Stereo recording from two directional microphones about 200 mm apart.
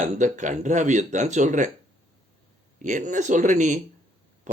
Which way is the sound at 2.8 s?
40° right (ahead or behind).